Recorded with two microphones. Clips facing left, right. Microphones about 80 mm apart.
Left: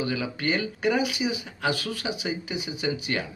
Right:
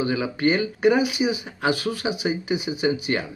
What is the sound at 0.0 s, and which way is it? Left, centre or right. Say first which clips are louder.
Speech: right 6 dB; right.